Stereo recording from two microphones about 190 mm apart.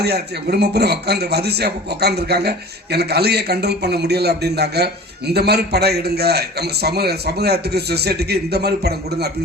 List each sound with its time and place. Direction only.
0.0 s speech: 60° right (ahead or behind)